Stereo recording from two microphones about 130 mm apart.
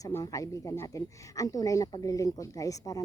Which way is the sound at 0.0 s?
25° left (ahead or behind).